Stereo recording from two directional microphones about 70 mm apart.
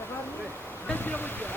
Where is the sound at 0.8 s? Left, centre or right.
Left.